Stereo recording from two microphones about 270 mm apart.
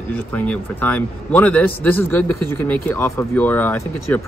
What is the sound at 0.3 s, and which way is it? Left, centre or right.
A man's voice, centre.